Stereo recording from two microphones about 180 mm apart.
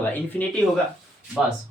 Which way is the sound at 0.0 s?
10° left (ahead or behind).